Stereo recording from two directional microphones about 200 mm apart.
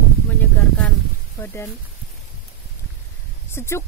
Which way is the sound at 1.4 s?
10° left (ahead or behind).